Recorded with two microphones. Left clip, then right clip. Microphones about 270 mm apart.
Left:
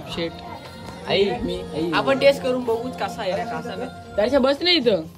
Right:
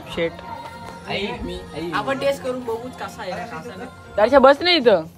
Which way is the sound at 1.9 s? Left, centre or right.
Centre.